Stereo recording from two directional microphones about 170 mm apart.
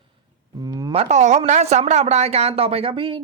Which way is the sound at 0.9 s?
40° right (ahead or behind).